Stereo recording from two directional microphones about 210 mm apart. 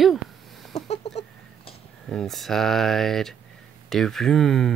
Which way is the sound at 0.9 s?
30° left (ahead or behind).